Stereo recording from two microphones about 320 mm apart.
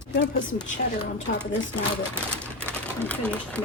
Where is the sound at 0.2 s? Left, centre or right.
Left.